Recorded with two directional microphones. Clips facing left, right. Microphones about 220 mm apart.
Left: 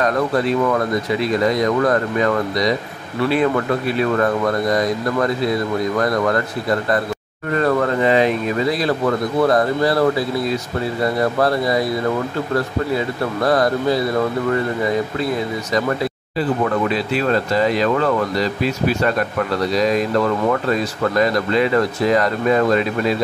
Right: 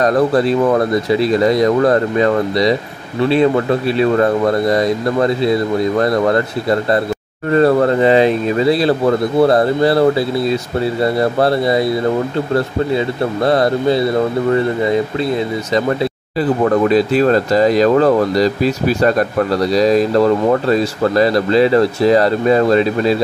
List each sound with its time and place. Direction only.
0.0 s speech: 35° right (ahead or behind)
16.3 s speech: 40° right (ahead or behind)